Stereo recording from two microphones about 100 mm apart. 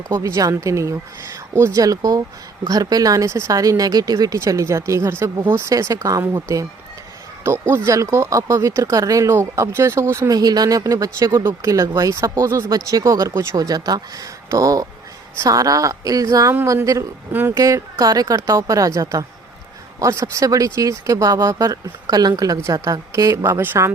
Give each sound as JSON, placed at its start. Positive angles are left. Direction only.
{"t": 0.1, "sound": "speech", "side_deg": -35}
{"t": 10.3, "sound": "speech", "side_deg": -40}
{"t": 17.3, "sound": "speech", "side_deg": -20}
{"t": 17.6, "sound": "speech", "side_deg": -30}